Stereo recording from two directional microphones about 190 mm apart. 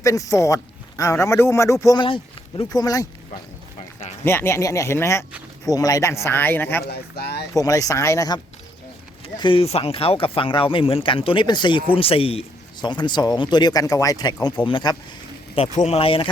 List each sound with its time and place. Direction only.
0.0 s speech: 15° left (ahead or behind)
4.3 s speech: 10° left (ahead or behind)
6.8 s speech: 60° left (ahead or behind)
7.5 s speech: 15° left (ahead or behind)
9.2 s speech: 30° left (ahead or behind)
15.5 s speech: 35° left (ahead or behind)